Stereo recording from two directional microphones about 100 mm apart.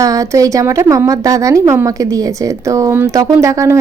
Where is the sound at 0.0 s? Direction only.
35° right (ahead or behind).